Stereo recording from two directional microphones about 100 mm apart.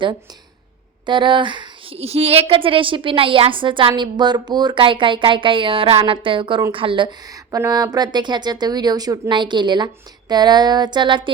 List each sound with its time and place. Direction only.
1.0 s a woman's voice: 55° right (ahead or behind)
7.3 s a woman's voice: 35° right (ahead or behind); by 11.3 s 50° right (ahead or behind)